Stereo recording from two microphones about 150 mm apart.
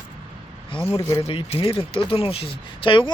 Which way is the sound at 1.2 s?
40° left (ahead or behind).